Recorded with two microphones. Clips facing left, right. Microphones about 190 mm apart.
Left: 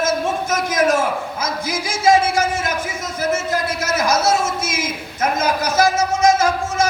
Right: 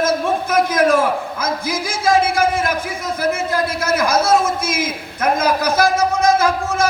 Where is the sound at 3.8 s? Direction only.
55° right (ahead or behind).